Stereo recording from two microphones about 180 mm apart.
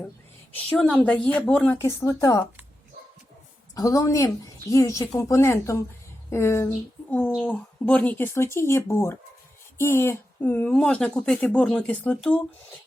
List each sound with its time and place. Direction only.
0.8 s speech: 5° left (ahead or behind)
3.8 s speech: 20° left (ahead or behind)